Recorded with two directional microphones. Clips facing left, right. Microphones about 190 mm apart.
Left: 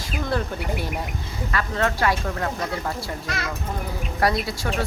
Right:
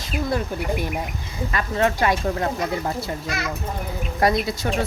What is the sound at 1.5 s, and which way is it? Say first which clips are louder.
Speech: right 3 dB; 20° right (ahead or behind).